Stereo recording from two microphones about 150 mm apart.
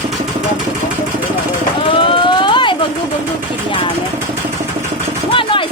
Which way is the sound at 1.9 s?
35° left (ahead or behind).